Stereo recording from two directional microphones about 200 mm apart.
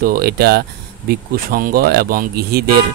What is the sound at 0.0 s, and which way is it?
Speech, 50° right (ahead or behind).